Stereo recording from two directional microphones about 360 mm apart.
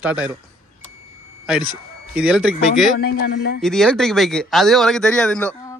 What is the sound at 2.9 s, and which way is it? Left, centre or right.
Speech, left.